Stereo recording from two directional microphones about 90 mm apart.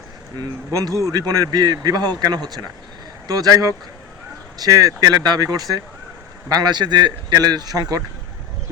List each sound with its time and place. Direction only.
0.3 s speech: 45° right (ahead or behind)